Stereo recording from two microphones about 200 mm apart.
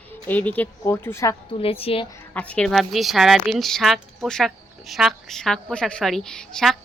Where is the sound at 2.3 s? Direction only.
5° left (ahead or behind).